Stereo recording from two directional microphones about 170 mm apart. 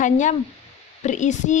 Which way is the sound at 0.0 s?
45° left (ahead or behind).